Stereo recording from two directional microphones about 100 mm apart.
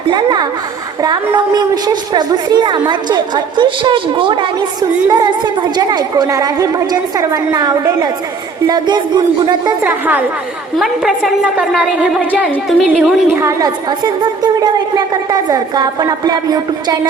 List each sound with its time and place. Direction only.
0.1 s a woman's voice: 45° right (ahead or behind)
4.8 s a woman's voice: 45° right (ahead or behind)
9.8 s a woman's voice: 15° right (ahead or behind)
10.8 s a woman's voice: 5° right (ahead or behind)
13.4 s a woman's voice: 30° right (ahead or behind)
14.0 s a woman's voice: 45° right (ahead or behind)